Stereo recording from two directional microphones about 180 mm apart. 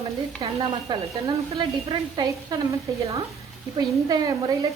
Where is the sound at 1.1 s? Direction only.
15° right (ahead or behind).